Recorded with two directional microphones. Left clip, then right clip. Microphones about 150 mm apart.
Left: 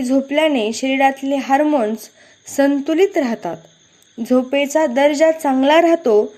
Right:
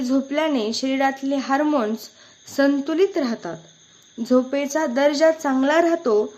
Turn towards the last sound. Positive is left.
turn(degrees=15)  # may be behind; listen again after turning